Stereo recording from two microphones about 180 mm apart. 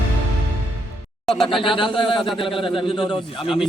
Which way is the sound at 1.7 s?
30° left (ahead or behind).